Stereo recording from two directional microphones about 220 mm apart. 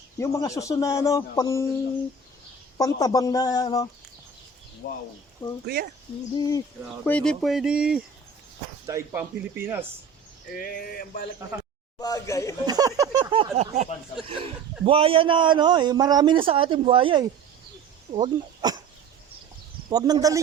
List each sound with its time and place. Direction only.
0.2 s a man's voice: 15° left (ahead or behind)
2.7 s a man's voice: 15° left (ahead or behind)
4.8 s speech: 55° left (ahead or behind)
5.6 s speech: 45° right (ahead or behind)
7.0 s speech: 5° left (ahead or behind); by 9.8 s 10° right (ahead or behind)
10.5 s a sound: 40° left (ahead or behind)
11.9 s a man's voice: 15° left (ahead or behind)
12.6 s a man's voice: 15° right (ahead or behind)
19.9 s speech: 15° right (ahead or behind)